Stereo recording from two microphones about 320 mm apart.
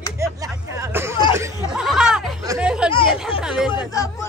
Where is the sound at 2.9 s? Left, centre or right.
Centre.